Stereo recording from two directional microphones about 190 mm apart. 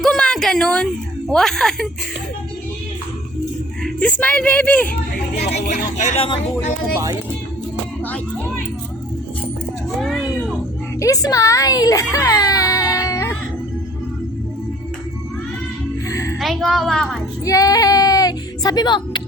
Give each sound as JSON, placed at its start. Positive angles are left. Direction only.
{"t": 0.0, "sound": "a sound", "side_deg": 0}
{"t": 1.3, "sound": "a woman's voice", "side_deg": 0}
{"t": 3.8, "sound": "a woman's voice", "side_deg": 5}
{"t": 5.5, "sound": "speech", "side_deg": 45}
{"t": 8.0, "sound": "music", "side_deg": 5}
{"t": 10.0, "sound": "a sound", "side_deg": 0}
{"t": 11.0, "sound": "a woman's voice", "side_deg": 20}
{"t": 12.1, "sound": "music", "side_deg": 20}
{"t": 16.0, "sound": "music", "side_deg": 15}
{"t": 16.4, "sound": "a woman's voice", "side_deg": 0}
{"t": 17.4, "sound": "a sound", "side_deg": 15}